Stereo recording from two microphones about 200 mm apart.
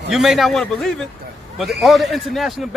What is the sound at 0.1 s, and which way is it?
Speech, centre (ahead or behind).